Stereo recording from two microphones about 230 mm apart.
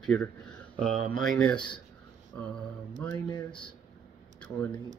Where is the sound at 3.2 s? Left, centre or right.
Left.